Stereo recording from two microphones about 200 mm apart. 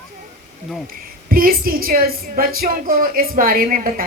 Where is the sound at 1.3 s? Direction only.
45° right (ahead or behind).